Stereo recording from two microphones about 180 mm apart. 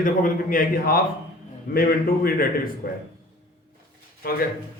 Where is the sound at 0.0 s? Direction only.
50° left (ahead or behind).